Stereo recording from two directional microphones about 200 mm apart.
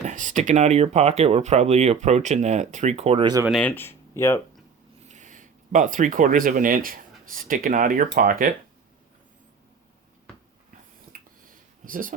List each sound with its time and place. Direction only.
0.0 s speech: 40° right (ahead or behind); by 3.4 s 25° right (ahead or behind)
3.6 s speech: 10° left (ahead or behind)
5.0 s speech: 35° right (ahead or behind)
11.1 s a sound: 45° right (ahead or behind)